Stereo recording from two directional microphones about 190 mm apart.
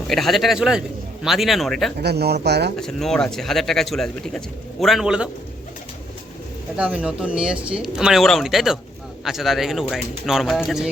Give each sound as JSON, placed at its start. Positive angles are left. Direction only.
{"t": 0.1, "sound": "speech", "side_deg": 0}
{"t": 2.0, "sound": "speech", "side_deg": -55}
{"t": 2.7, "sound": "speech", "side_deg": 0}
{"t": 6.7, "sound": "speech", "side_deg": -5}